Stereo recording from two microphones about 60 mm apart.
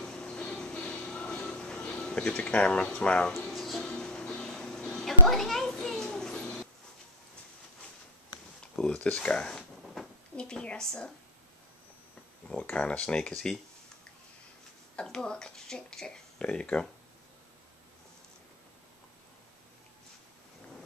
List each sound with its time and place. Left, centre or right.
0.0 s music: centre
3.5 s music: centre
8.7 s speech: centre
12.6 s speech: centre
15.0 s speech: centre